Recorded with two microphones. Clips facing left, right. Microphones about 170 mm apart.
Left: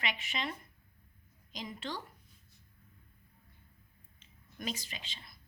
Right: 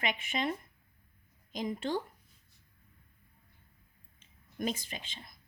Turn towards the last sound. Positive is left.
turn(degrees=-50)  # may be behind; listen again after turning